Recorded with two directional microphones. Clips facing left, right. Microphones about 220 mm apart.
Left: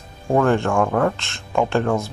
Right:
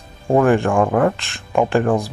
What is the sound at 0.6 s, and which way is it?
Speech, 15° right (ahead or behind).